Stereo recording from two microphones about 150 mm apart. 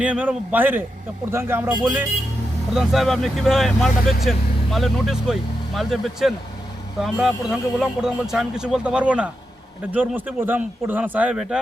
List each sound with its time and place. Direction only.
0.0 s speech: 10° right (ahead or behind)
2.7 s speech: centre (ahead or behind)